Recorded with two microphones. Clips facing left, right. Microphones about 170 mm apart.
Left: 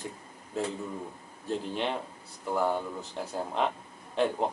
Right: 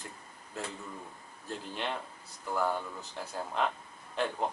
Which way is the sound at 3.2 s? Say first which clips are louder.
Left 4 dB; 5° left (ahead or behind).